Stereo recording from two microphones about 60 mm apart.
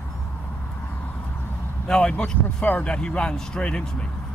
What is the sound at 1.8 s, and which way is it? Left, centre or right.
A man's voice, centre.